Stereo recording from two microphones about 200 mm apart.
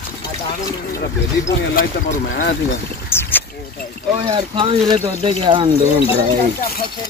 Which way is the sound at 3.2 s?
10° left (ahead or behind).